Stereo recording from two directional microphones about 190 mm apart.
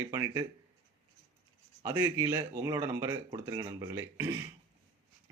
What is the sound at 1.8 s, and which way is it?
Speech, 20° right (ahead or behind).